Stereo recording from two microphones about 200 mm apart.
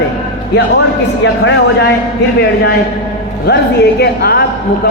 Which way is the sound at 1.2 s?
65° left (ahead or behind).